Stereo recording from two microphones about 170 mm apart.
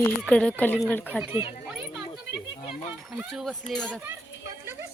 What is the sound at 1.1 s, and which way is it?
Speech, 10° right (ahead or behind).